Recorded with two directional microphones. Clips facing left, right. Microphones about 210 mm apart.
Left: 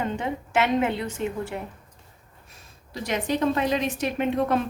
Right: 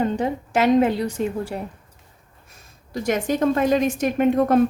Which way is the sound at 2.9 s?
45° right (ahead or behind).